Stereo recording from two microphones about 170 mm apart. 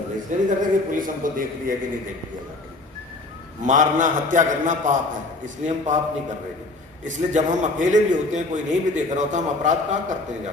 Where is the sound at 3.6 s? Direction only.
50° right (ahead or behind).